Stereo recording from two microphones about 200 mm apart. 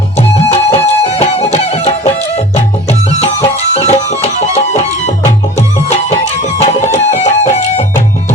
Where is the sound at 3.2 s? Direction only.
30° left (ahead or behind).